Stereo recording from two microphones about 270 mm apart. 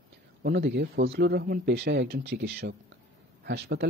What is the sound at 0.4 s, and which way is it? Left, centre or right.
Speech, right.